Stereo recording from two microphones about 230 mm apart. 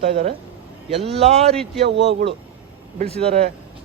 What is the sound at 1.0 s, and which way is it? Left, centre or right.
Speech, right.